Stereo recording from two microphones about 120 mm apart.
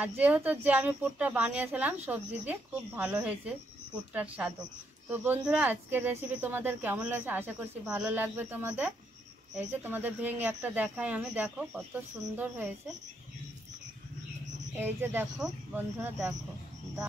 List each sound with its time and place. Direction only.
0.0 s a woman's voice: 15° right (ahead or behind)
14.8 s a woman's voice: 15° right (ahead or behind)